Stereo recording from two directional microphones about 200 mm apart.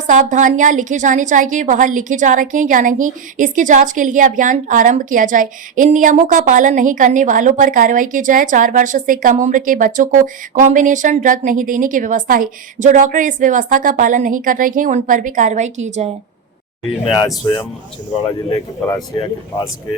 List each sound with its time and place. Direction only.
0.1 s a woman's voice: 40° right (ahead or behind)
17.2 s speech: 20° left (ahead or behind)